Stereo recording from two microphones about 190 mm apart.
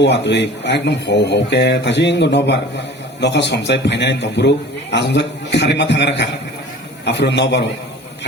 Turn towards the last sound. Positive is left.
turn(degrees=65)  # may be behind; listen again after turning